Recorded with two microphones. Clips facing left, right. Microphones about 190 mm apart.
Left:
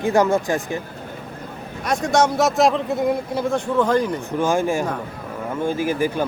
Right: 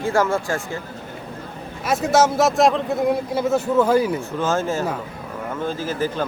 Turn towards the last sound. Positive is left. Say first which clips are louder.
# left 3 dB
turn(degrees=10)  # may be behind; listen again after turning